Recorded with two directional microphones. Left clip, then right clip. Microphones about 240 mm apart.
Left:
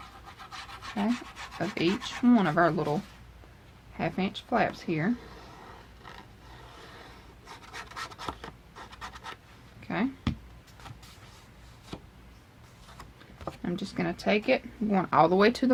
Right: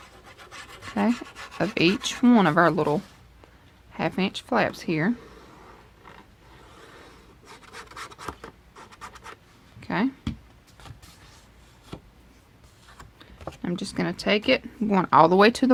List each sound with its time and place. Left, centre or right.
1.5 s speech: right
3.9 s speech: right
7.4 s scratch: centre
8.8 s a sound: centre
9.8 s a sound: right
13.6 s speech: right